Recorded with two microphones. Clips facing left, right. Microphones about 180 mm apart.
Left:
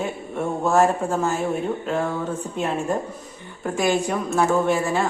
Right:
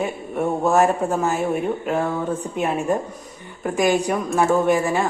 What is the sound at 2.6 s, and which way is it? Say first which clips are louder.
Speech: right 2 dB; 20° right (ahead or behind).